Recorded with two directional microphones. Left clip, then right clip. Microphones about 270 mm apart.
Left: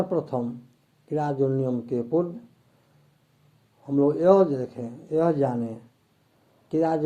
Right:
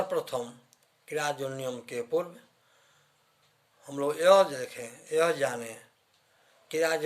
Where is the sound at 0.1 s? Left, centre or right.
Right.